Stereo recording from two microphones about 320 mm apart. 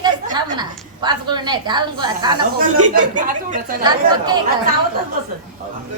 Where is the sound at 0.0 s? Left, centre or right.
Centre.